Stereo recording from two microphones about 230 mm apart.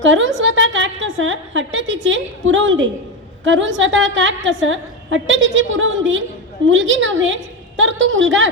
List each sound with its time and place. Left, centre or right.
0.0 s a woman's voice: right